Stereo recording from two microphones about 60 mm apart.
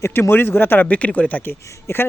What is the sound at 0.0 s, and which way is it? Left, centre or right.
Speech, left.